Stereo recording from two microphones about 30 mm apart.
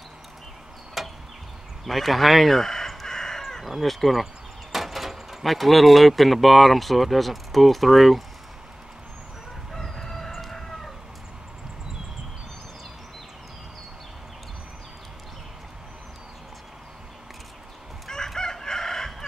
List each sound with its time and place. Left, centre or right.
1.0 s a sound: centre
1.9 s speech: centre
2.5 s speech: centre
3.1 s chicken: centre
3.6 s speech: centre
9.9 s chicken: centre
18.1 s chicken: centre